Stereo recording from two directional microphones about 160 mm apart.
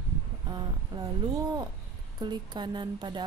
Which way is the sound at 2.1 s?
25° right (ahead or behind).